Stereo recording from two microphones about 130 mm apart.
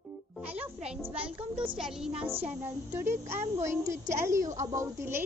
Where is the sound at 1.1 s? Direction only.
10° right (ahead or behind).